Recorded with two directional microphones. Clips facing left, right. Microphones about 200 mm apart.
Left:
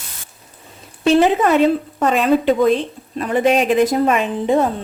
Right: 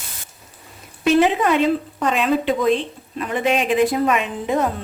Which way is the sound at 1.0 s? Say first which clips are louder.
Left 3 dB; 35° left (ahead or behind).